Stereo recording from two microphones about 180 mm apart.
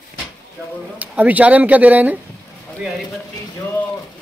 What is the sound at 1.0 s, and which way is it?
Speech, 10° right (ahead or behind).